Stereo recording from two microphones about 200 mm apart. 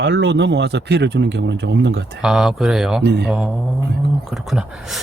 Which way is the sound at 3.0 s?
55° right (ahead or behind).